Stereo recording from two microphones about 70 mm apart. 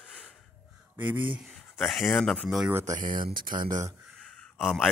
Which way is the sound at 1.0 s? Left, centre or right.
Right.